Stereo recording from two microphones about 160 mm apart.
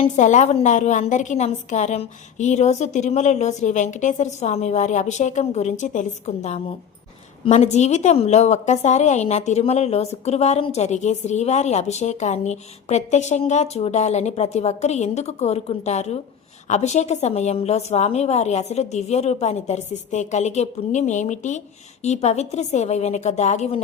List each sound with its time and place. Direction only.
0.0 s a woman's voice: 50° left (ahead or behind)